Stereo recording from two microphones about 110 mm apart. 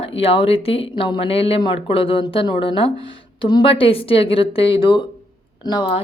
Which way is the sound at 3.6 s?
60° left (ahead or behind).